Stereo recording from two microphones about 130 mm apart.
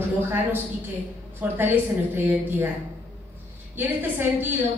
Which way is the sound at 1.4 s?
10° right (ahead or behind).